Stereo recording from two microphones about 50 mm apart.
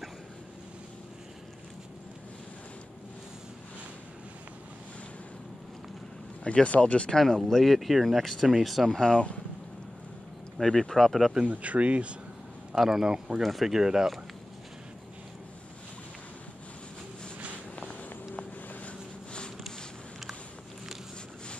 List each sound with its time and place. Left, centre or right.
6.4 s speech: left
7.2 s speech: centre
9.0 s speech: centre
10.6 s speech: centre
11.4 s speech: right
12.7 s speech: centre
13.4 s speech: centre
17.7 s walk: left
18.9 s a sound: centre